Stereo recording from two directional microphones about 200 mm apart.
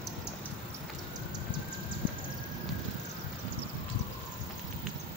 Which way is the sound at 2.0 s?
25° right (ahead or behind).